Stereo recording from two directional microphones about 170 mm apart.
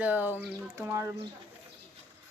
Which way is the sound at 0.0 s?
10° right (ahead or behind).